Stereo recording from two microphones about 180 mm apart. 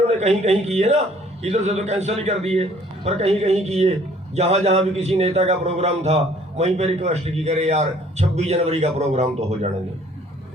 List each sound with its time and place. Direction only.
0.1 s a man's voice: 40° right (ahead or behind)